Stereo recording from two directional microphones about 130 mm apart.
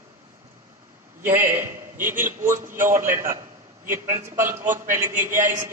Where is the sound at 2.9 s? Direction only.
90° right.